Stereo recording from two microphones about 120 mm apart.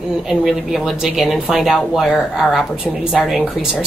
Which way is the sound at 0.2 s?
5° right (ahead or behind).